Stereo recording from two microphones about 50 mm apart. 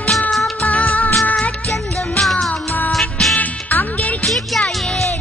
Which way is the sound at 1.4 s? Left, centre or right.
Centre.